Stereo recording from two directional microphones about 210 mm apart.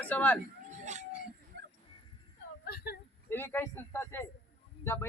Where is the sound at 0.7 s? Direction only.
35° right (ahead or behind).